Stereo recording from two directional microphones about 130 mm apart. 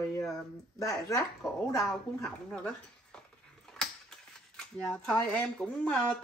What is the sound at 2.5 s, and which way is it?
Speech, 5° left (ahead or behind).